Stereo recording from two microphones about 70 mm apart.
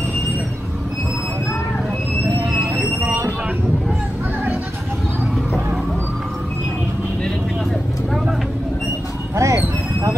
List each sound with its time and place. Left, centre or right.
9.3 s dog: right